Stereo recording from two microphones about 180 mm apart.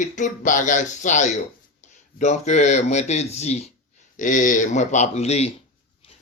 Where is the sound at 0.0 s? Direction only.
45° left (ahead or behind).